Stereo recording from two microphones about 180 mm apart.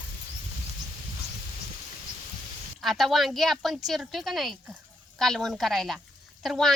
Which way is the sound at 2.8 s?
Centre (ahead or behind).